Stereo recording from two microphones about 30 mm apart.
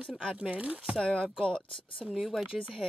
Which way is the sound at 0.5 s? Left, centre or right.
Right.